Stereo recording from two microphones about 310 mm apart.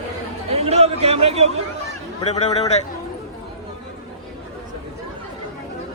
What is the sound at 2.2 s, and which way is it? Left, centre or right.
Speech, left.